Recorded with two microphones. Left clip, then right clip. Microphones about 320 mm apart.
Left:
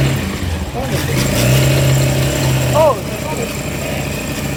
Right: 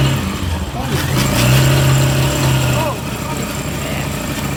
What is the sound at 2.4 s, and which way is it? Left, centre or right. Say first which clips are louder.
Vehicle: even; centre.